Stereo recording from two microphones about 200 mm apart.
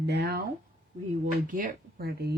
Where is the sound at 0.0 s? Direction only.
55° right (ahead or behind).